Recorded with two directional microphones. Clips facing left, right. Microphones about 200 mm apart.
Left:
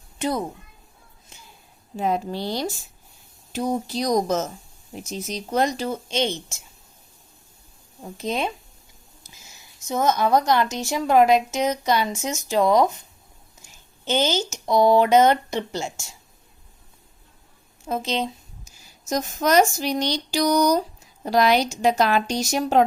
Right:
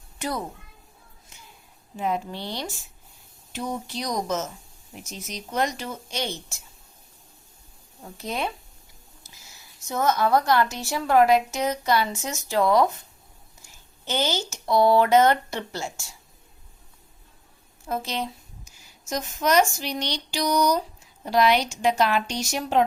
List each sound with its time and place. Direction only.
0.2 s a child's voice: 20° left (ahead or behind)
2.0 s speech: 40° left (ahead or behind); by 6.6 s 20° left (ahead or behind)
8.0 s a woman's voice: 20° left (ahead or behind)
17.8 s a woman's voice: 20° left (ahead or behind)
18.6 s speech: 40° left (ahead or behind)